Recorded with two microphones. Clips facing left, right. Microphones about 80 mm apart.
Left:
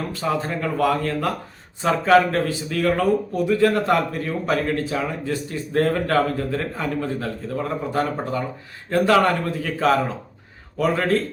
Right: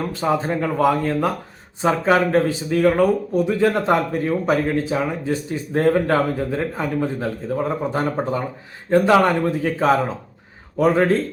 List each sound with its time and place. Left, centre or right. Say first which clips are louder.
0.1 s speech: right 4 dB; right